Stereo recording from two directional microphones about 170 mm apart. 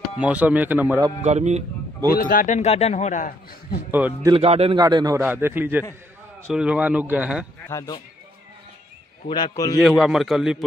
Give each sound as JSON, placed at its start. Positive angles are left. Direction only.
{"t": 0.2, "sound": "speech", "side_deg": -10}
{"t": 1.2, "sound": "a man's voice", "side_deg": -40}
{"t": 2.1, "sound": "a man's voice", "side_deg": 55}
{"t": 3.9, "sound": "speech", "side_deg": -10}
{"t": 4.3, "sound": "a man's voice", "side_deg": -35}
{"t": 4.7, "sound": "a man's voice", "side_deg": -25}
{"t": 5.2, "sound": "speech", "side_deg": -10}
{"t": 7.6, "sound": "a man's voice", "side_deg": 20}
{"t": 9.3, "sound": "a man's voice", "side_deg": 25}
{"t": 9.8, "sound": "a man's voice", "side_deg": 0}